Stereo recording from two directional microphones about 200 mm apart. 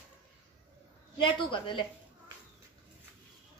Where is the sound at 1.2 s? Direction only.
25° left (ahead or behind).